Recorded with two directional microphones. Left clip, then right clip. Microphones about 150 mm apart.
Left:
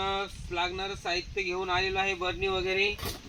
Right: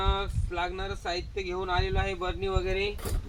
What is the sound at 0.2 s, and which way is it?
Speech, 45° left (ahead or behind).